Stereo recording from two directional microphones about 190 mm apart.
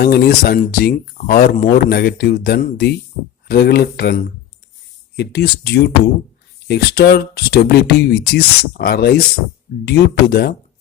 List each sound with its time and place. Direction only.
0.0 s speech: 55° left (ahead or behind)